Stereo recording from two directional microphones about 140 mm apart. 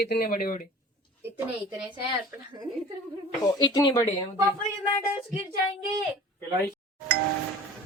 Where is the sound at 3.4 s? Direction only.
30° left (ahead or behind).